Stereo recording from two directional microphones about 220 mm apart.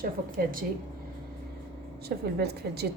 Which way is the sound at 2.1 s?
45° right (ahead or behind).